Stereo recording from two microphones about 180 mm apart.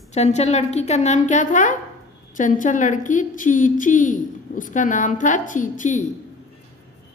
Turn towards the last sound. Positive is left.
turn(degrees=45)  # may be behind; listen again after turning